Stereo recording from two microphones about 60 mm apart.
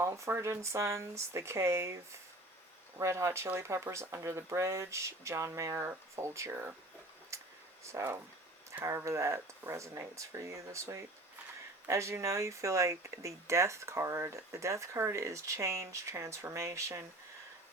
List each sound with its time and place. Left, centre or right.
0.0 s speech: right
0.3 s speech: right
3.0 s speech: right
7.3 s a sound: right
7.9 s speech: right